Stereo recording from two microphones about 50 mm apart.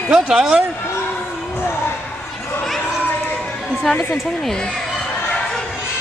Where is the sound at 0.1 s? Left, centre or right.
Centre.